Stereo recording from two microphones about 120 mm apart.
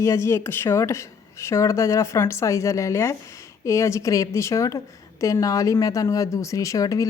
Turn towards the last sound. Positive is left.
turn(degrees=30)  # may be behind; listen again after turning